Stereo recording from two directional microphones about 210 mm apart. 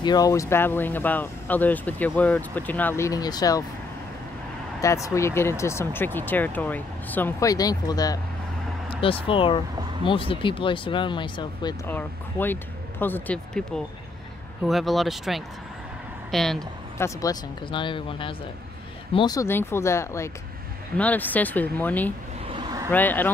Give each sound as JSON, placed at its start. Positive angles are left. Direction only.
{"t": 0.0, "sound": "speech", "side_deg": 20}
{"t": 4.8, "sound": "speech", "side_deg": 15}
{"t": 11.9, "sound": "speech", "side_deg": 10}
{"t": 17.0, "sound": "speech", "side_deg": 15}
{"t": 22.5, "sound": "a sound", "side_deg": -20}
{"t": 22.8, "sound": "speech", "side_deg": 10}